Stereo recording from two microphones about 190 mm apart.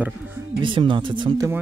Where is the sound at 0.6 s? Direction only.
25° right (ahead or behind).